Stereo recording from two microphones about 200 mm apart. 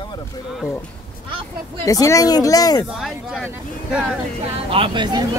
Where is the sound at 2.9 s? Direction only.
Centre (ahead or behind).